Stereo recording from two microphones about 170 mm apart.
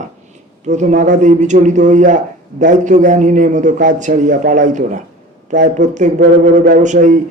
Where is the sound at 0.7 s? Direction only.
45° right (ahead or behind).